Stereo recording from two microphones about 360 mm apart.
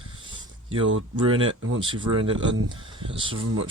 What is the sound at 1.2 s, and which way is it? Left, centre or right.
Speech, centre.